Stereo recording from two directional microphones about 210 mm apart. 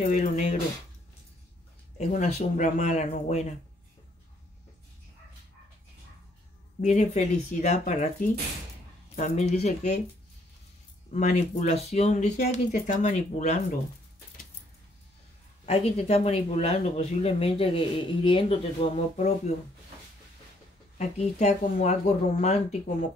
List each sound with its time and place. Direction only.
0.0 s speech: 35° left (ahead or behind)
2.0 s speech: 35° left (ahead or behind)
6.8 s speech: 35° left (ahead or behind)
11.1 s speech: 35° left (ahead or behind)
15.6 s speech: 30° left (ahead or behind)
21.0 s speech: 35° left (ahead or behind)